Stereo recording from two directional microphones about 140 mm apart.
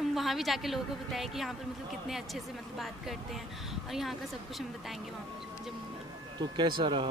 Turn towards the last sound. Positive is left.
turn(degrees=-35)  # may be behind; listen again after turning